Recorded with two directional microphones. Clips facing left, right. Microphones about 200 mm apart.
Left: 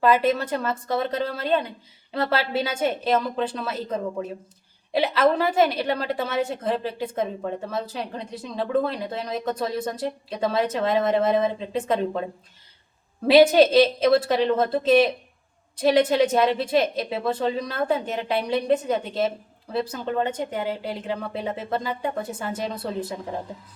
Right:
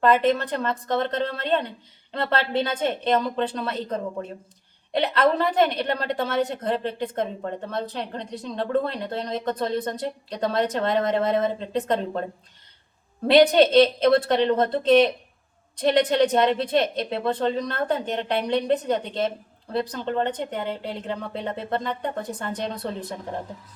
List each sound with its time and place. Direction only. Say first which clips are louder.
0.0 s a woman's voice: even; 5° left (ahead or behind)
13.2 s speech: left 1 dB; 5° left (ahead or behind)